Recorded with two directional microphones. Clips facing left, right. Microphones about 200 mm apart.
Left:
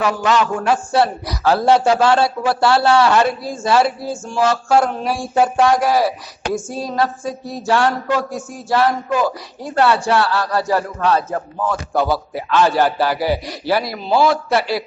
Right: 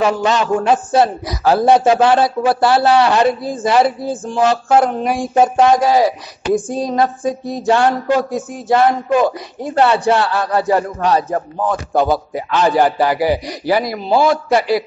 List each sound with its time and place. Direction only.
0.0 s a man's voice: 25° right (ahead or behind)
7.6 s a man's voice: 20° right (ahead or behind)